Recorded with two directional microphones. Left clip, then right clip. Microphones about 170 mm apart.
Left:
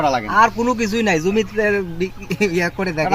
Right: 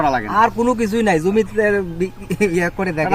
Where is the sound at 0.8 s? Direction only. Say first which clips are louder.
Right 1 dB; 15° right (ahead or behind).